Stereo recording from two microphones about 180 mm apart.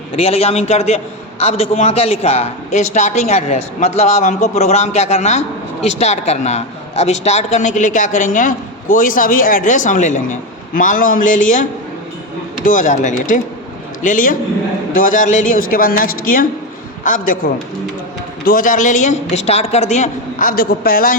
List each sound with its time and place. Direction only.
0.2 s a man's voice: 35° left (ahead or behind)
12.6 s a woman's voice: 45° left (ahead or behind)
18.4 s a woman's voice: 50° left (ahead or behind)